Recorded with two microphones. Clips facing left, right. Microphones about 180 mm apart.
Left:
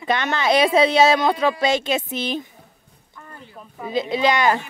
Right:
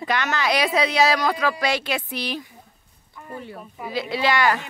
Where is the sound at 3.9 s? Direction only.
20° left (ahead or behind).